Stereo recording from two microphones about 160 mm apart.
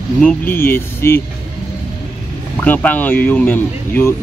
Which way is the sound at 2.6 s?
10° left (ahead or behind).